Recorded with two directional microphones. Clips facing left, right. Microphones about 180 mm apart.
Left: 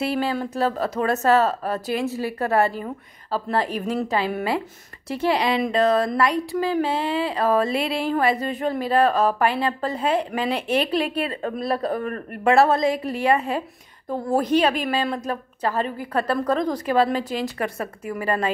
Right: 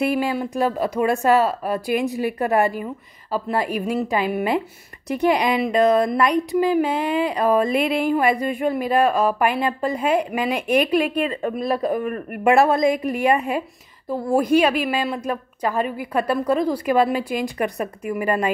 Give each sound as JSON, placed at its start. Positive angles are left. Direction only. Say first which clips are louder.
{"t": 0.0, "sound": "speech", "louder": "right 2 dB", "side_deg": -15}